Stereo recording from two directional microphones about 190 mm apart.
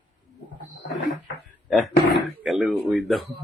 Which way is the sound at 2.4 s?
Centre (ahead or behind).